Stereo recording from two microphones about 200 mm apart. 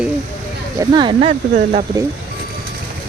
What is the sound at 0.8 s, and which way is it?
Speech, 20° right (ahead or behind).